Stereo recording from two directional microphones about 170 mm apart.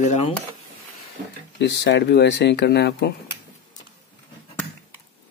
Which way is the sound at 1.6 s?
90° left.